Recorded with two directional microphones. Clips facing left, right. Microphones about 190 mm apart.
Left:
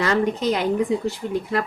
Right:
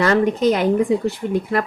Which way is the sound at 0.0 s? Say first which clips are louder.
Right 5 dB; 55° right (ahead or behind).